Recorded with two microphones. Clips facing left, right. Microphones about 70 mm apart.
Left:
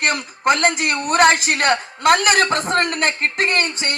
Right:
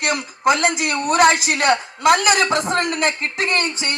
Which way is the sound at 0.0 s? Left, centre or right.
Left.